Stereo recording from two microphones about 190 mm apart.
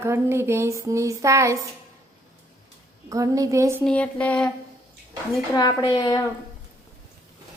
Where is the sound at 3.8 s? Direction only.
5° left (ahead or behind).